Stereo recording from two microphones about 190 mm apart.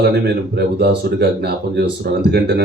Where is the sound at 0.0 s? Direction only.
55° right (ahead or behind).